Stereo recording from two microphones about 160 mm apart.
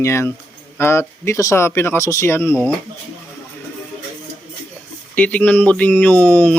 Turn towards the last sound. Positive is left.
turn(degrees=10)  # may be behind; listen again after turning